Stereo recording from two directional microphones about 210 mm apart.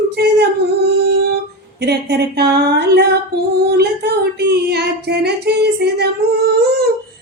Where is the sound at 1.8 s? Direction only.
50° right (ahead or behind).